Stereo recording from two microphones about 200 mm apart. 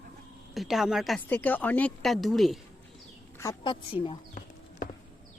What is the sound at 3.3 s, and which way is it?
Speech, 20° left (ahead or behind).